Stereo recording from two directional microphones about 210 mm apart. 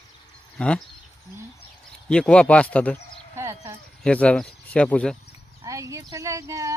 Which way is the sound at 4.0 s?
5° left (ahead or behind).